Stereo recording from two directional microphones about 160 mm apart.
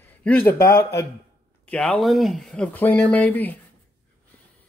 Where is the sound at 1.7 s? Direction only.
Centre (ahead or behind).